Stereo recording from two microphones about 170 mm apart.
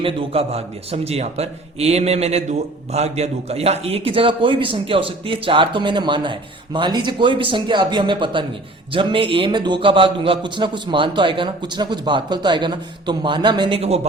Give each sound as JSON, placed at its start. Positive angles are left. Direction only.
{"t": 0.0, "sound": "a man's voice", "side_deg": -35}